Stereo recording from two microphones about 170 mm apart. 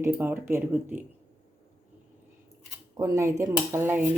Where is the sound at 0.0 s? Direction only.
10° right (ahead or behind).